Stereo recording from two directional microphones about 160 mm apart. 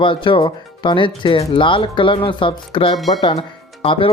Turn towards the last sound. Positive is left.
turn(degrees=35)  # may be behind; listen again after turning